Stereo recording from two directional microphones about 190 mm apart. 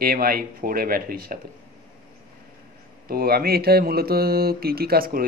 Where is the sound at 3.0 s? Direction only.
55° right (ahead or behind).